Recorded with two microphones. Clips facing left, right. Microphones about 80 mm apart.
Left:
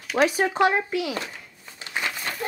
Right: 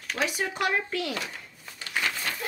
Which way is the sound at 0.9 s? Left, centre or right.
Centre.